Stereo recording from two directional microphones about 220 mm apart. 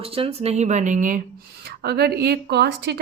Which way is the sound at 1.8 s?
45° right (ahead or behind).